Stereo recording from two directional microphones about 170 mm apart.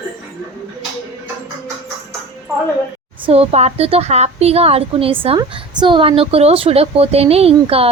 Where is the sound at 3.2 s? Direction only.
35° right (ahead or behind).